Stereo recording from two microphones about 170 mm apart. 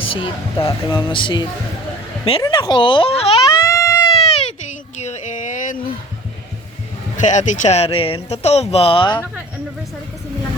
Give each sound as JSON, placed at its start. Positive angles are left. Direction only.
{"t": 0.1, "sound": "speech", "side_deg": 30}
{"t": 3.6, "sound": "baby cry", "side_deg": 20}
{"t": 4.2, "sound": "a sound", "side_deg": 40}
{"t": 7.2, "sound": "speech", "side_deg": 45}